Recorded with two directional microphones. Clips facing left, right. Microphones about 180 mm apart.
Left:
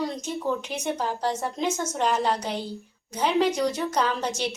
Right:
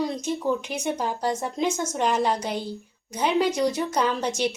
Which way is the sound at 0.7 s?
10° right (ahead or behind).